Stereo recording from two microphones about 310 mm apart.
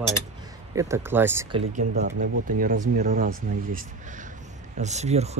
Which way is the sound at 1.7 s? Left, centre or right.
Right.